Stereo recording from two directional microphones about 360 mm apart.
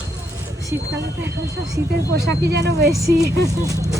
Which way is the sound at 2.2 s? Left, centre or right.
Right.